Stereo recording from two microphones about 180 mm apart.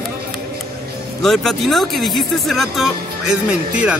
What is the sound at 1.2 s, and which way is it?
Speech, centre (ahead or behind).